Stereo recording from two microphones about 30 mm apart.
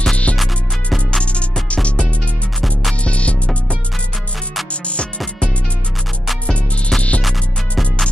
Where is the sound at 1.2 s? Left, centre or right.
Left.